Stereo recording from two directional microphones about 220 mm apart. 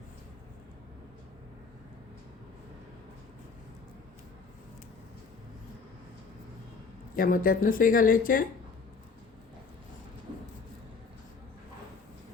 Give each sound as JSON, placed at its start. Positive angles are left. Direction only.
{"t": 7.2, "sound": "speech", "side_deg": 40}